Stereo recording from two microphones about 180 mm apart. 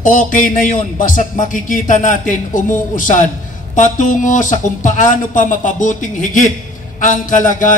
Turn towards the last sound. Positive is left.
turn(degrees=45)  # may be behind; listen again after turning